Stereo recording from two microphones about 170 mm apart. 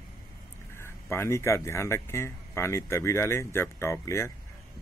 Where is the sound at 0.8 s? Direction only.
15° left (ahead or behind).